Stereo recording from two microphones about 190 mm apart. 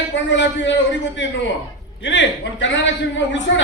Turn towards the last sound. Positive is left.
turn(degrees=70)  # may be behind; listen again after turning